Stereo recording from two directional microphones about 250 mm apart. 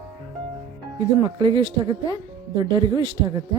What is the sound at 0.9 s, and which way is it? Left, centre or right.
Speech, centre.